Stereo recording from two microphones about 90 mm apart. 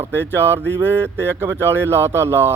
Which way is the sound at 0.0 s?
25° right (ahead or behind).